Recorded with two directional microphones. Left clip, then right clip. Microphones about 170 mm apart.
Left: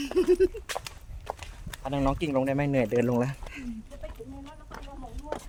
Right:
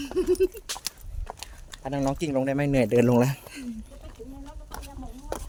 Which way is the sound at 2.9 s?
85° right.